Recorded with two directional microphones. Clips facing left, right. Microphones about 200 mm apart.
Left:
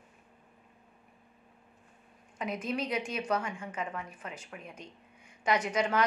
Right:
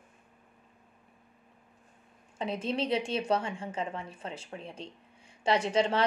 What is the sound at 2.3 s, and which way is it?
A woman's voice, 30° right (ahead or behind).